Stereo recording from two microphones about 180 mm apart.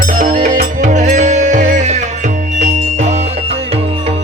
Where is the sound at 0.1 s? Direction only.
45° right (ahead or behind).